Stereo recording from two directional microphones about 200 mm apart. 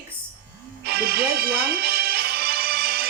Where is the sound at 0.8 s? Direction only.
50° right (ahead or behind).